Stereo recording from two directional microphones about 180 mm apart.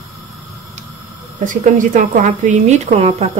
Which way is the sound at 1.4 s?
45° right (ahead or behind).